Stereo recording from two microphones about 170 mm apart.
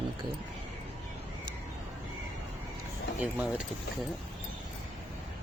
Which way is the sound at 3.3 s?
10° right (ahead or behind).